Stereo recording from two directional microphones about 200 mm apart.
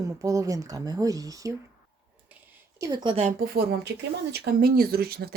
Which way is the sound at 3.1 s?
35° right (ahead or behind).